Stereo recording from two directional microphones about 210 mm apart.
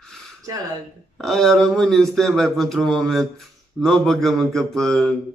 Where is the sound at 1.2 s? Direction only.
Centre (ahead or behind).